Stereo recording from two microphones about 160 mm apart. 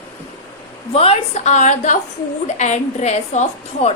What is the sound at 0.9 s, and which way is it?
A woman's voice, 40° left (ahead or behind).